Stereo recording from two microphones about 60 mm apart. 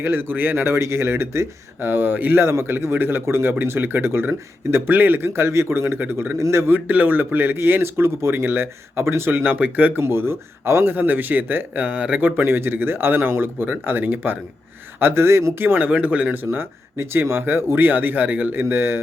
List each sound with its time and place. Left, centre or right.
0.0 s speech: right
6.3 s speech: right
6.7 s a man's voice: right
10.0 s speech: right
10.9 s a man's voice: right
15.8 s a man's voice: right
16.3 s speech: right